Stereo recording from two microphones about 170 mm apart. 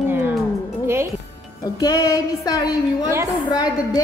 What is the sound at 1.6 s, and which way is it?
A woman's voice, 20° left (ahead or behind).